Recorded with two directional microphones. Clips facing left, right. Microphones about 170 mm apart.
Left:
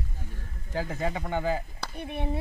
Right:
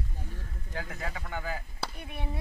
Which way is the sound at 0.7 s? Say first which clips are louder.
Left 8 dB; 30° left (ahead or behind).